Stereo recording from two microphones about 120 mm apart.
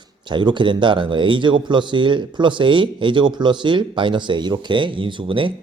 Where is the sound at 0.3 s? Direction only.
40° right (ahead or behind).